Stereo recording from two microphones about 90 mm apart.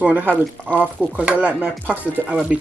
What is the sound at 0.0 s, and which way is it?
Speech, 20° right (ahead or behind).